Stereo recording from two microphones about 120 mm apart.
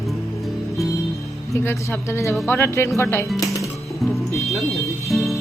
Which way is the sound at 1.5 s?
20° left (ahead or behind).